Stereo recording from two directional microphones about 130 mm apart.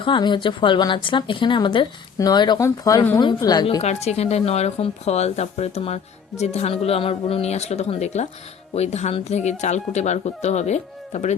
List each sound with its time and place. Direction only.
0.0 s speech: 35° left (ahead or behind)
3.8 s speech: 55° left (ahead or behind)